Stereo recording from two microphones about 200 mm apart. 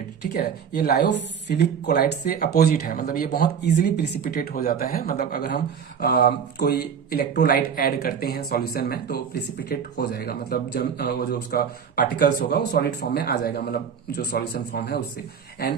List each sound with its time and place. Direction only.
0.3 s speech: 50° left (ahead or behind)